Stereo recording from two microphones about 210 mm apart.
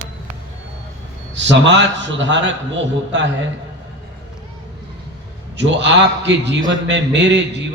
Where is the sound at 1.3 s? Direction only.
60° right (ahead or behind).